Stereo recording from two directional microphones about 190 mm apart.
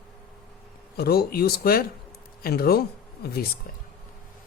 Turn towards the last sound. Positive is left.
turn(degrees=55)  # may be behind; listen again after turning